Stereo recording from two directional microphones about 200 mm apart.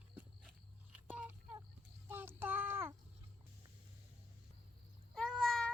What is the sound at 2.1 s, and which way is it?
Child singing, 10° right (ahead or behind).